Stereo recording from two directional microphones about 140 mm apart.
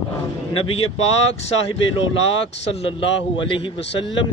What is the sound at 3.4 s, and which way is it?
Speech, 35° left (ahead or behind).